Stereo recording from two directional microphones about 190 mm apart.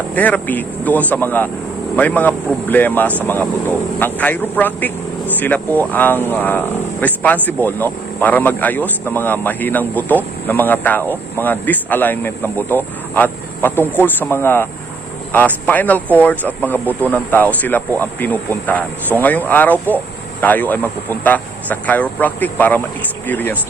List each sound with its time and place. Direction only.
0.1 s speech: 5° left (ahead or behind)